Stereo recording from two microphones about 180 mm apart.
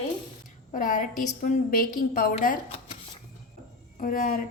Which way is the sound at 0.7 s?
50° left (ahead or behind).